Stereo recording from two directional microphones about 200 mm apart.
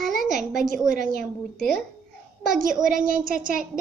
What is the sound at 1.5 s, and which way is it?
Child singing, centre (ahead or behind).